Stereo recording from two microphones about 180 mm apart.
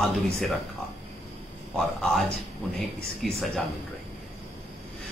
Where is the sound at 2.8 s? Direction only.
Centre (ahead or behind).